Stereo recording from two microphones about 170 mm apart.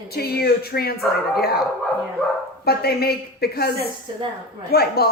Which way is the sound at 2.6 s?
65° left (ahead or behind).